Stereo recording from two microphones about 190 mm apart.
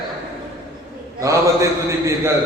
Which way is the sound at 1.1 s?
15° right (ahead or behind).